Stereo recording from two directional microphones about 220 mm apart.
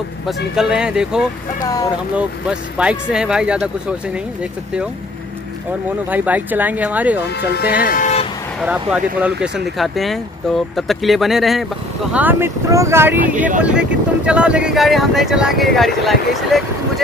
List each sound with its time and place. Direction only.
0.3 s speech: centre (ahead or behind)
1.6 s speech: 15° left (ahead or behind)
2.8 s speech: 5° right (ahead or behind)
6.0 s speech: 5° right (ahead or behind)
7.8 s vehicle: 35° left (ahead or behind)
8.6 s speech: 5° right (ahead or behind)